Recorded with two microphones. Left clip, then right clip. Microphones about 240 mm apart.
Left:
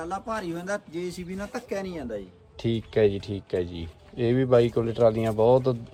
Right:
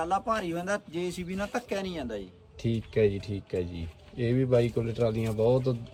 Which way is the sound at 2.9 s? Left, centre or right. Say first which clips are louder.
Left 3 dB; centre.